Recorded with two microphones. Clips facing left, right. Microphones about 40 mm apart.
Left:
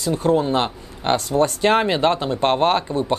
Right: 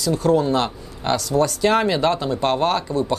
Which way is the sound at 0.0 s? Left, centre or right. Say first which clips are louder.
Right 1 dB; left.